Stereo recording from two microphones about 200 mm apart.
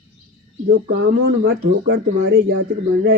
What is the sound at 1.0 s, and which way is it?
Speech, 55° right (ahead or behind).